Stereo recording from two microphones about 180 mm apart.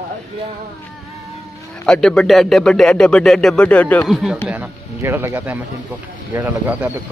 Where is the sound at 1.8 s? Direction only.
5° left (ahead or behind).